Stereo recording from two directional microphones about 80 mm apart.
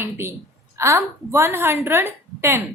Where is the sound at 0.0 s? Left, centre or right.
Right.